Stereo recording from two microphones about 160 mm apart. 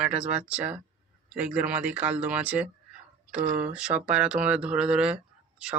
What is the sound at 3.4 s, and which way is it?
Speech, 50° right (ahead or behind).